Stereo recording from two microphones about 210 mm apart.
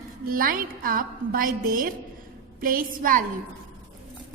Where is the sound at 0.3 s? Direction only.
45° right (ahead or behind).